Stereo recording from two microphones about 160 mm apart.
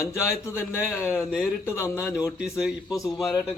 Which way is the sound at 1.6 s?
20° left (ahead or behind).